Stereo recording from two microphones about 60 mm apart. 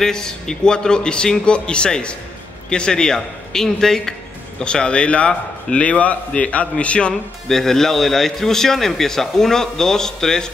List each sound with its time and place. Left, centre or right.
0.0 s a man's voice: centre
7.4 s a man's voice: centre